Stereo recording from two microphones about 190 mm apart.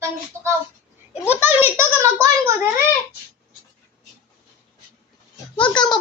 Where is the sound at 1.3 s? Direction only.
10° right (ahead or behind).